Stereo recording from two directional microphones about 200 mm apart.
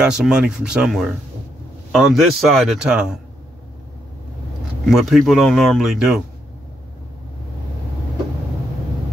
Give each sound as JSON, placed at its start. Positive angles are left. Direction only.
{"t": 0.0, "sound": "speech", "side_deg": -5}
{"t": 4.8, "sound": "speech", "side_deg": 0}